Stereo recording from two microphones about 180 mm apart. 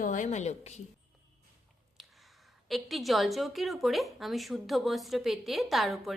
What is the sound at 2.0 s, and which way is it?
A woman's voice, centre (ahead or behind).